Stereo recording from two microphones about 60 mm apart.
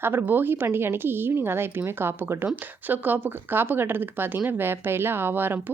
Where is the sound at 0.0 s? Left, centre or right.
Right.